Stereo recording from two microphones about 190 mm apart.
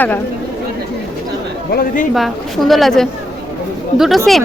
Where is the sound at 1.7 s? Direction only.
50° left (ahead or behind).